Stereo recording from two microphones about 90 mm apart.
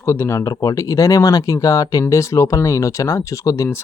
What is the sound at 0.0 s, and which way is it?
Speech, 30° left (ahead or behind).